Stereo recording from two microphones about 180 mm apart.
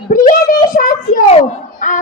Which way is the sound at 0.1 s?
50° left (ahead or behind).